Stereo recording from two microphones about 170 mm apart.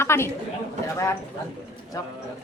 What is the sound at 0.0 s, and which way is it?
Speech, 15° left (ahead or behind).